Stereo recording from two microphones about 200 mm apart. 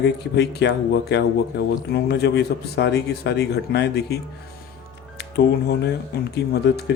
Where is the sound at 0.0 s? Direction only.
60° left (ahead or behind).